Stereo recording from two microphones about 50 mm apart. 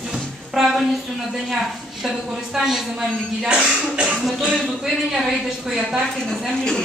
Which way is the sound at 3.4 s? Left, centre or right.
Right.